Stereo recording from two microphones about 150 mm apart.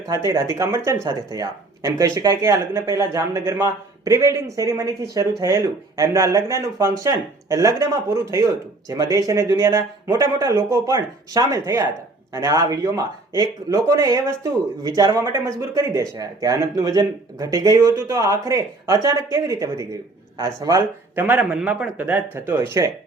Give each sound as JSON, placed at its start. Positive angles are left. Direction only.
{"t": 0.5, "sound": "speech", "side_deg": -20}
{"t": 21.2, "sound": "a man's voice", "side_deg": -10}